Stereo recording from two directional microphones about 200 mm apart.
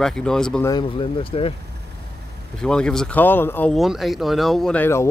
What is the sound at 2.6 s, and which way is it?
Speech, 5° left (ahead or behind).